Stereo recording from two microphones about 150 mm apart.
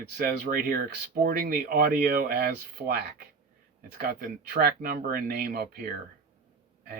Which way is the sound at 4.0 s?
90° right.